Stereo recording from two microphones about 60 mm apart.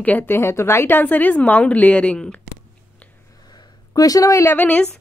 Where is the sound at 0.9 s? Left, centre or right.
Left.